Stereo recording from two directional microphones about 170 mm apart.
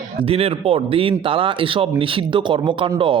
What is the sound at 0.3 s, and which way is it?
Speech, 35° right (ahead or behind).